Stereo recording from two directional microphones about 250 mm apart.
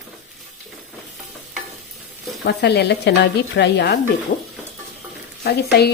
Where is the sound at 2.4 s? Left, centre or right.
Left.